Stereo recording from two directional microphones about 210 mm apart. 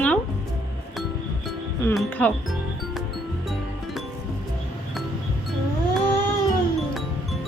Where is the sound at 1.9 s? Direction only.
10° left (ahead or behind).